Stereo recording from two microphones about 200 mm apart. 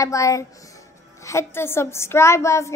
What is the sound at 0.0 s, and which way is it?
A woman's voice, 15° left (ahead or behind).